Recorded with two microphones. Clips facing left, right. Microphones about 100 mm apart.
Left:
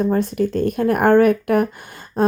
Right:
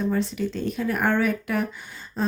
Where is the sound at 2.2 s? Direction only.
55° left (ahead or behind).